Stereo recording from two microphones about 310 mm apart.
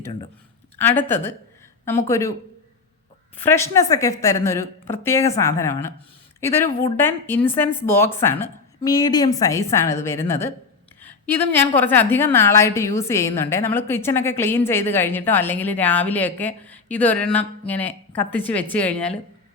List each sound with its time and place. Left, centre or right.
0.0 s a woman's voice: centre
3.3 s a woman's voice: centre